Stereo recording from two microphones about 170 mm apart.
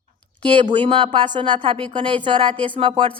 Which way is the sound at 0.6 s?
30° right (ahead or behind).